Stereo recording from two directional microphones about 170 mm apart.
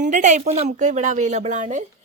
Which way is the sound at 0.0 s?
45° right (ahead or behind).